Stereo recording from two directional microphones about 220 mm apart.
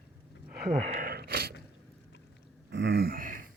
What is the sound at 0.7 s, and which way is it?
Speech, 30° right (ahead or behind).